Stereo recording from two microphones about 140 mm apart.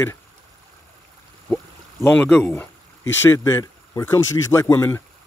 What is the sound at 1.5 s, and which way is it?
Speech, 15° left (ahead or behind).